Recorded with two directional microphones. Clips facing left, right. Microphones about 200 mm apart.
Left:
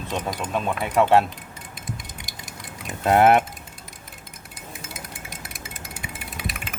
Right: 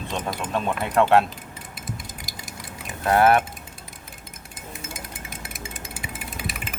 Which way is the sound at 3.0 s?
20° left (ahead or behind).